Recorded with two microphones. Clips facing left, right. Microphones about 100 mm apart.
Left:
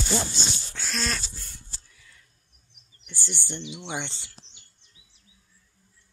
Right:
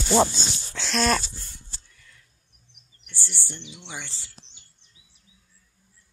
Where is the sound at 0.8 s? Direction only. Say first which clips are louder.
Right 9 dB; 75° right (ahead or behind).